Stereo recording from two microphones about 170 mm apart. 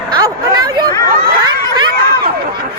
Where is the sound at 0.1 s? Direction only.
25° right (ahead or behind).